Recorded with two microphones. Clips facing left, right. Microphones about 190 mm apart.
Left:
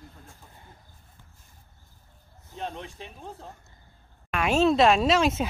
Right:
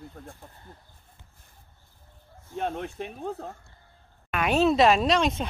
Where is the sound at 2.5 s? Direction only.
55° right (ahead or behind).